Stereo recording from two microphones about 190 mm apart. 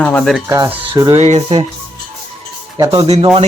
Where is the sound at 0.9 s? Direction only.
20° right (ahead or behind).